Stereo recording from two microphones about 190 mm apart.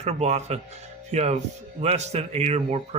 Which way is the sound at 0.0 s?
35° right (ahead or behind).